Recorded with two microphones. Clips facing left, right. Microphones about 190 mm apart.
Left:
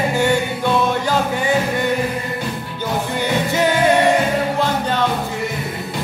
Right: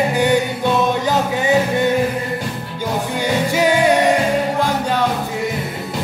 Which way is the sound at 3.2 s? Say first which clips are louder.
Right 2 dB; 10° right (ahead or behind).